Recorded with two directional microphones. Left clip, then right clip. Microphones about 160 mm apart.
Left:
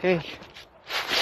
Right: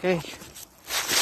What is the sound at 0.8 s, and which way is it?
Zipper, 40° right (ahead or behind).